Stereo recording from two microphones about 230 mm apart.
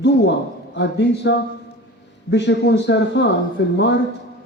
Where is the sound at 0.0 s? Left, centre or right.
Left.